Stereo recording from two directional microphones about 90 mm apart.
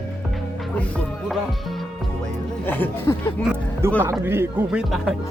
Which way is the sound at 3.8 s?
25° right (ahead or behind).